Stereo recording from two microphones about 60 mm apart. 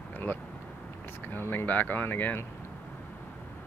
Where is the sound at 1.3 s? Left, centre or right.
Left.